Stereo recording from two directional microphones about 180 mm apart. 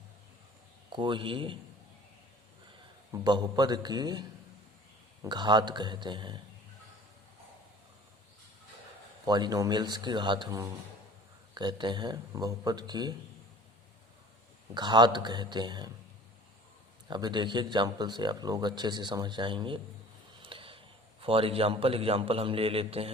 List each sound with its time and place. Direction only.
0.9 s speech: 25° right (ahead or behind)
3.1 s speech: 25° right (ahead or behind)
9.2 s speech: 20° right (ahead or behind)
14.8 s speech: 25° right (ahead or behind)
17.1 s speech: 25° right (ahead or behind)
20.4 s a sound: 30° right (ahead or behind)
21.2 s a man's voice: 30° right (ahead or behind)